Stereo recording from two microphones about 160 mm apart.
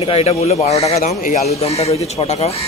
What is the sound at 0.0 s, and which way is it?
Speech, 35° left (ahead or behind).